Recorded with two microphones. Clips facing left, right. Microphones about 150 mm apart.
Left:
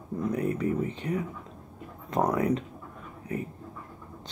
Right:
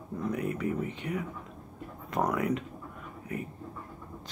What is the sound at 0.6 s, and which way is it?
Speech, 30° left (ahead or behind).